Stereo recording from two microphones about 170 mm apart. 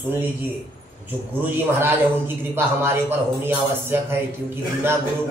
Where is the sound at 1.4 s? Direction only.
15° right (ahead or behind).